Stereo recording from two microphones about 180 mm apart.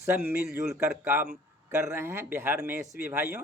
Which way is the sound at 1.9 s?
15° right (ahead or behind).